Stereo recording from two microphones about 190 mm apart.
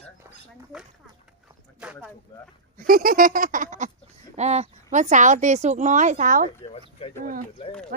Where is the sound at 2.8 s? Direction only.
50° right (ahead or behind).